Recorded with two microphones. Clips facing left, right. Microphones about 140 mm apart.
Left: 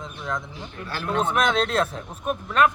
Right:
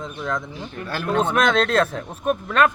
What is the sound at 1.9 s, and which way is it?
Speech, 90° right.